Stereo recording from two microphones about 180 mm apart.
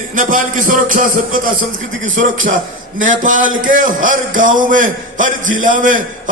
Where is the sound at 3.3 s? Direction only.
50° right (ahead or behind).